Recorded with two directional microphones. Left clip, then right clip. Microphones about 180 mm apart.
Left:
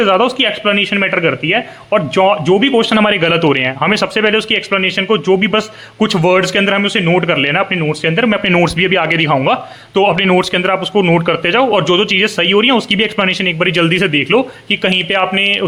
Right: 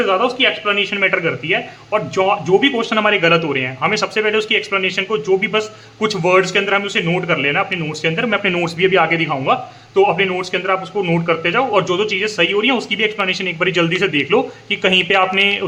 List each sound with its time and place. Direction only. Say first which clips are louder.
0.0 s speech: left 3 dB; 35° left (ahead or behind); by 15.6 s 20° left (ahead or behind)